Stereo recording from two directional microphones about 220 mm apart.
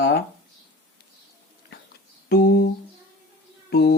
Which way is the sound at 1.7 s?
50° left (ahead or behind).